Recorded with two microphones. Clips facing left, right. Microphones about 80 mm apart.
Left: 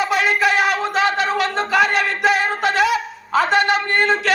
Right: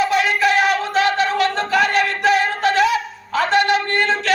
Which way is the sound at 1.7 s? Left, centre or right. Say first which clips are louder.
Left 1 dB; centre.